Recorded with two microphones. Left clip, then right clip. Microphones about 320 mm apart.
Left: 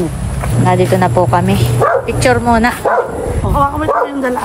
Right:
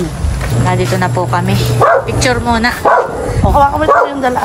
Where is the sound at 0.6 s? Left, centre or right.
Centre.